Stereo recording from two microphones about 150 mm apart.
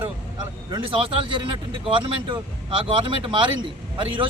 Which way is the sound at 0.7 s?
35° right (ahead or behind).